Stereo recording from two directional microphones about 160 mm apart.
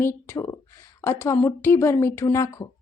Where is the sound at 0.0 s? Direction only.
15° left (ahead or behind).